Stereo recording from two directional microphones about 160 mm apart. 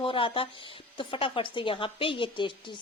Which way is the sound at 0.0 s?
35° left (ahead or behind).